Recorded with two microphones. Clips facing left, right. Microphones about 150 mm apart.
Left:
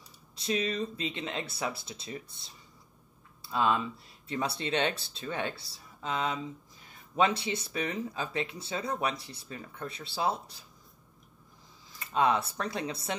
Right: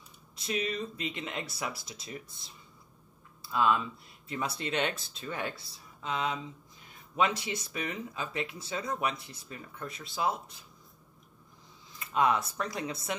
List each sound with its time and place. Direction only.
0.4 s speech: 30° left (ahead or behind)
3.4 s speech: 25° left (ahead or behind)
11.9 s speech: 30° left (ahead or behind)